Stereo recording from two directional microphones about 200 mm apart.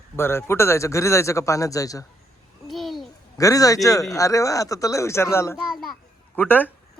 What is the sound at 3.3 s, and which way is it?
Speech, 15° left (ahead or behind).